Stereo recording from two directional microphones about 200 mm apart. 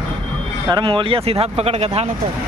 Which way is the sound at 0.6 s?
20° right (ahead or behind).